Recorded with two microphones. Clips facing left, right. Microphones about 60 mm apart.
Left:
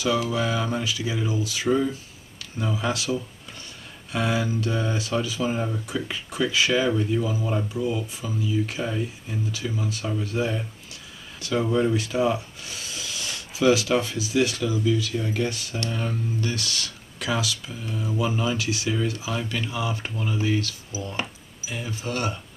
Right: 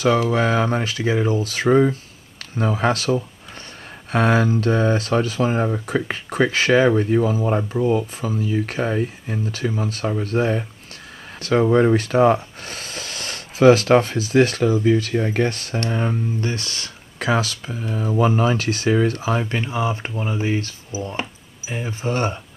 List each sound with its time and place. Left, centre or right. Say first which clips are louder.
0.0 s speech: right 6 dB; right
11.7 s speech: right 6 dB; right